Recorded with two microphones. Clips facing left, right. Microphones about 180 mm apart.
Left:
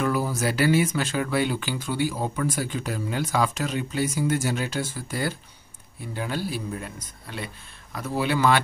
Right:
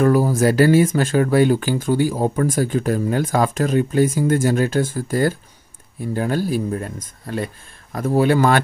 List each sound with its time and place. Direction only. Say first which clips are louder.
0.0 s speech: right 9 dB; 45° right (ahead or behind)